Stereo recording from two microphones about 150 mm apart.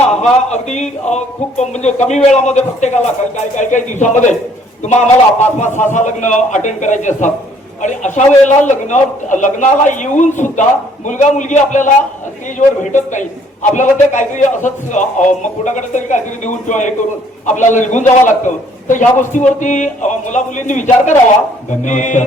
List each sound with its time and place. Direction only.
0.1 s a man's voice: 50° left (ahead or behind)
5.5 s a man's voice: 55° left (ahead or behind)